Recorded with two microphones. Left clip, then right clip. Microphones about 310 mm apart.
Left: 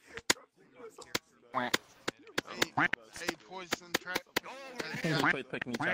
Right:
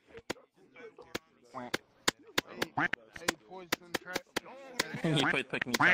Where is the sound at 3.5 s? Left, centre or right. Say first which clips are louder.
Left 3 dB; left.